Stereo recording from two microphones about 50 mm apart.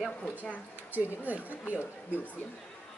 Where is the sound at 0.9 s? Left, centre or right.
Right.